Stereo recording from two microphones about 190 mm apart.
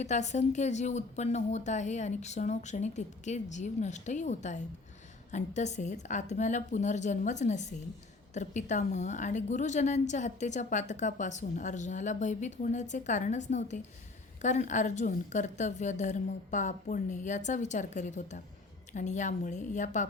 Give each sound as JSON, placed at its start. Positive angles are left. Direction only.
{"t": 0.0, "sound": "a woman's voice", "side_deg": 35}